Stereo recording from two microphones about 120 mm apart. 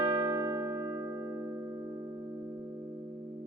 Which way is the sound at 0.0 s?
40° right (ahead or behind).